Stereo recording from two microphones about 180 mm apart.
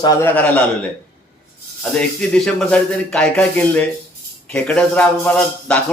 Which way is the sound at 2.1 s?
5° left (ahead or behind).